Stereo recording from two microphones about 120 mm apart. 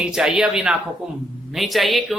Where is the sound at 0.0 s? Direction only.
5° right (ahead or behind).